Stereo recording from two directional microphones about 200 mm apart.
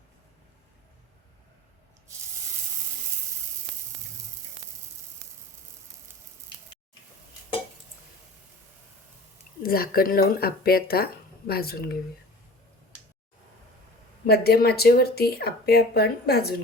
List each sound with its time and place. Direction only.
9.6 s speech: 45° left (ahead or behind)
14.3 s speech: 50° left (ahead or behind)